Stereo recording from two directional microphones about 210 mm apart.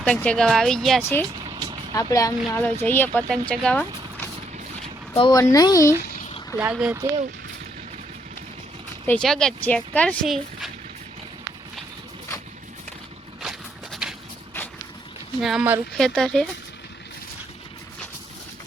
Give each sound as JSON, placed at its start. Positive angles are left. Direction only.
{"t": 0.0, "sound": "speech", "side_deg": 5}
{"t": 1.5, "sound": "vehicle", "side_deg": -20}
{"t": 1.9, "sound": "speech", "side_deg": 15}
{"t": 5.1, "sound": "speech", "side_deg": 20}
{"t": 6.6, "sound": "speech", "side_deg": -5}
{"t": 9.0, "sound": "speech", "side_deg": 5}
{"t": 13.4, "sound": "walk", "side_deg": 0}
{"t": 15.4, "sound": "speech", "side_deg": 0}